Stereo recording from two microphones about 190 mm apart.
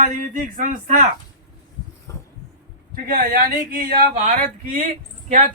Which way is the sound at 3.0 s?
50° right (ahead or behind).